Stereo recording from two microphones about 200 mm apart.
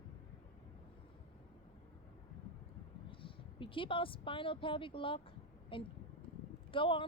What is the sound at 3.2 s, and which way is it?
Speech, 25° left (ahead or behind).